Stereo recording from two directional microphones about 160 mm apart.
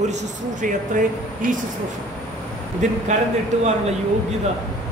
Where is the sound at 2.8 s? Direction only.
50° right (ahead or behind).